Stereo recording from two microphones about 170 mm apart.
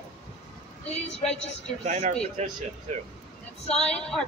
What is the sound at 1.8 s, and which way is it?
Speech, 45° right (ahead or behind).